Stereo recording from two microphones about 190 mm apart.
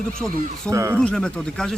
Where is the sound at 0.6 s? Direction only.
15° right (ahead or behind).